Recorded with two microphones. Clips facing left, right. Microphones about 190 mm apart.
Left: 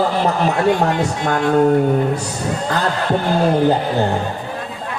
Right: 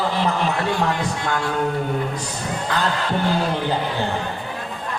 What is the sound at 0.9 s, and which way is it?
Speech, 20° left (ahead or behind).